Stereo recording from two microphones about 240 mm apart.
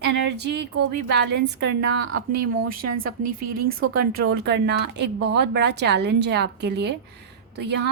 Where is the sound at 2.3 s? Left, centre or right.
Right.